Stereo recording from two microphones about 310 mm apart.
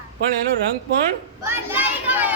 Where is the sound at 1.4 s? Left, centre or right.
Centre.